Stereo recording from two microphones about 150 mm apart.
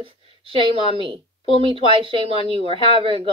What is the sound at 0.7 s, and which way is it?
Speech, 35° right (ahead or behind).